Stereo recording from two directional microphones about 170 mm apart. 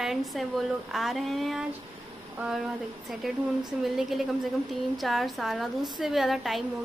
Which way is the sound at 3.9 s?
Centre (ahead or behind).